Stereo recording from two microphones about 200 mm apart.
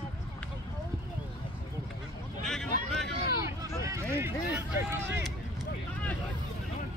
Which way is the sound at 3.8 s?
15° right (ahead or behind).